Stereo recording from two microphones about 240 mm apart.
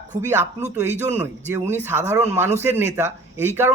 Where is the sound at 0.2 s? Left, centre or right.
Centre.